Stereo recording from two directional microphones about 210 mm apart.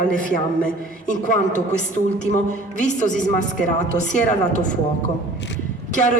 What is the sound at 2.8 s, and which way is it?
Speech, 35° left (ahead or behind).